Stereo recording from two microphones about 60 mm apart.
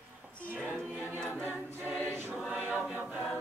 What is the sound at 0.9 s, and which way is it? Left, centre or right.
Choir, right.